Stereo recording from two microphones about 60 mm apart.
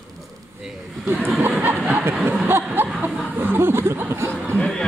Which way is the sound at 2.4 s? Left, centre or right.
Right.